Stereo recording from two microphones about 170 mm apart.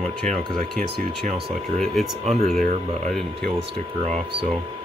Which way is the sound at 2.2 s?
40° right (ahead or behind).